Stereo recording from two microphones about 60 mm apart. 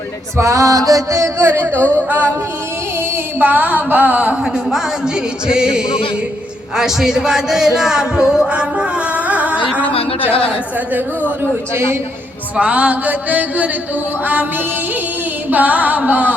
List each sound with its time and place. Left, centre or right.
0.3 s music: right
1.5 s a sound: right
1.8 s a sound: left
3.3 s music: right
4.5 s speech: centre
11.7 s a man's voice: right
12.5 s music: right
15.4 s music: right